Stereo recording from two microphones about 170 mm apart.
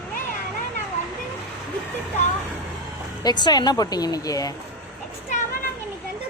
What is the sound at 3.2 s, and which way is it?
Speech, 25° left (ahead or behind).